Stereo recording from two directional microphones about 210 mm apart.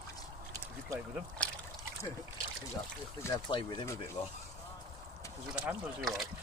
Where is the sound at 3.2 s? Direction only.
15° left (ahead or behind).